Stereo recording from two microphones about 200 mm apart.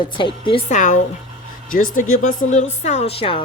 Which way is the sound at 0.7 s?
40° left (ahead or behind).